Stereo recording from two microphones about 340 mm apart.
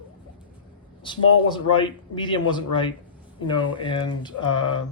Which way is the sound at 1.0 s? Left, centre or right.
Centre.